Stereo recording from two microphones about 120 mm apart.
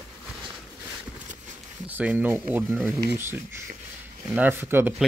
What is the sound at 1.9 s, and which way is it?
Speech, 15° right (ahead or behind).